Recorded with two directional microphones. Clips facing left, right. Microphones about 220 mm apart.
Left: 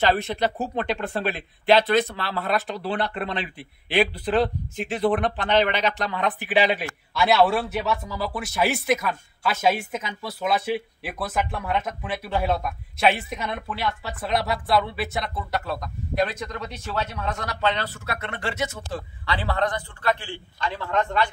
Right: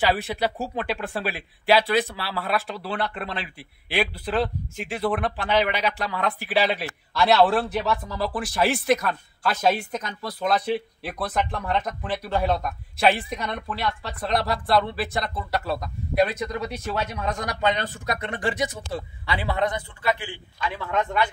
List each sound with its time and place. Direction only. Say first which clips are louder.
0.1 s speech: left 1 dB; 10° right (ahead or behind)